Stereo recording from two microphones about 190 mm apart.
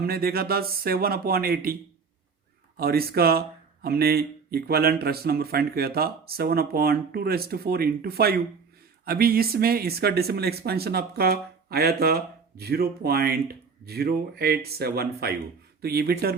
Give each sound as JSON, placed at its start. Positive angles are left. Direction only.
{"t": 0.0, "sound": "speech", "side_deg": -55}